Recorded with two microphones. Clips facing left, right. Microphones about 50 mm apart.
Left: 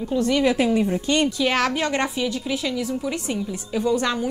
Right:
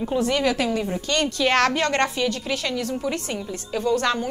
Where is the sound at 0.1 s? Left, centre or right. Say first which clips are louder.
Left 1 dB; right.